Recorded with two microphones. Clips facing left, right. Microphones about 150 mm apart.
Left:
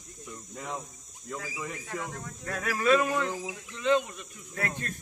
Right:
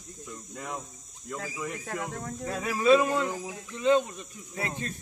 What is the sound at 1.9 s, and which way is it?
Speech, 45° right (ahead or behind).